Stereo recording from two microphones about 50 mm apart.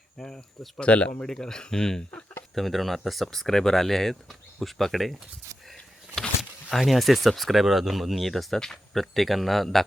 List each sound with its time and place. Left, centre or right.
0.2 s speech: centre
0.8 s speech: left
1.2 s speech: centre
2.6 s speech: centre
6.7 s speech: centre